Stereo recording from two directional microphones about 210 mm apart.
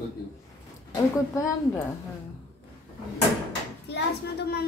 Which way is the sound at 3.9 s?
50° left (ahead or behind).